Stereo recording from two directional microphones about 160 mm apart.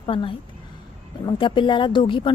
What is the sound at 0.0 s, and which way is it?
A woman's voice, 30° left (ahead or behind).